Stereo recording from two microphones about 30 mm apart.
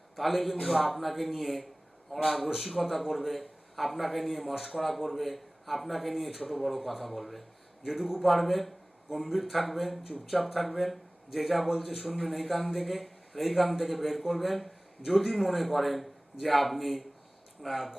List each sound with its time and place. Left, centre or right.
0.2 s a man's voice: centre
7.9 s a man's voice: centre
8.3 s a man's voice: centre